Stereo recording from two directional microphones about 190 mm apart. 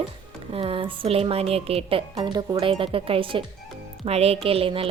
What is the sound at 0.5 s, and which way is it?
A woman's voice, 30° right (ahead or behind).